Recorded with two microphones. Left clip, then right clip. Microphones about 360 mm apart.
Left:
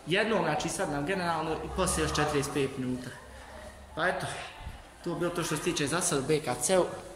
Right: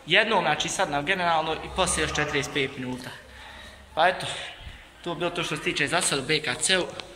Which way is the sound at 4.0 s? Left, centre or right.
Centre.